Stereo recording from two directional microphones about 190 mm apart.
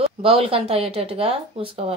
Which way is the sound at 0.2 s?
30° right (ahead or behind).